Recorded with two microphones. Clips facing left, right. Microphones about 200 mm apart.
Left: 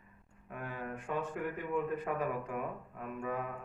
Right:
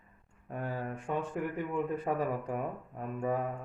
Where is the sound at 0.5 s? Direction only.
35° right (ahead or behind).